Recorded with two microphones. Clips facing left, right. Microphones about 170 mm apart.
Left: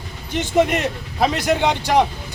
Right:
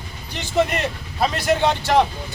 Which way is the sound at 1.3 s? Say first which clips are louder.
Even; 15° left (ahead or behind).